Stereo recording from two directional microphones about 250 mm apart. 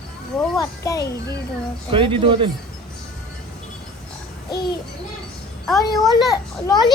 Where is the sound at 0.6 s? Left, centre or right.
Centre.